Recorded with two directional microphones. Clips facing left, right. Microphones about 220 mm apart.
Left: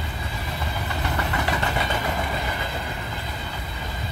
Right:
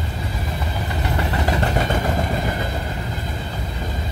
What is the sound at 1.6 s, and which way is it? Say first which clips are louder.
Vehicle: right 5 dB; 45° right (ahead or behind).